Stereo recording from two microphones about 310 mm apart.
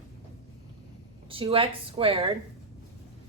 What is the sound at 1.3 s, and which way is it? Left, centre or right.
Speech, centre.